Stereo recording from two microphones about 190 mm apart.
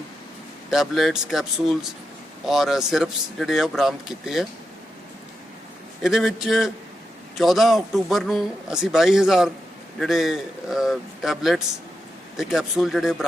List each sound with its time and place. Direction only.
0.7 s a man's voice: centre (ahead or behind)
6.0 s a man's voice: centre (ahead or behind)